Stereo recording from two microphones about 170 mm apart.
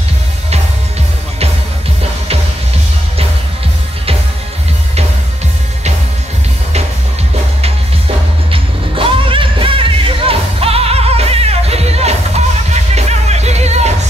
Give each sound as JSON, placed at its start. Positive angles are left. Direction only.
{"t": 8.5, "sound": "music", "side_deg": -30}